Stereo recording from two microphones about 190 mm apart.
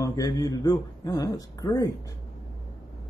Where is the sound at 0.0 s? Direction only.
20° left (ahead or behind).